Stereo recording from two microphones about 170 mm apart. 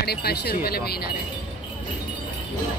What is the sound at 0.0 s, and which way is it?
Speech, 70° left (ahead or behind).